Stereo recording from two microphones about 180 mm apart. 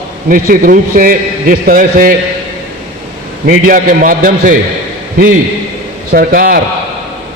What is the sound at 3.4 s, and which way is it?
A man's voice, 50° right (ahead or behind).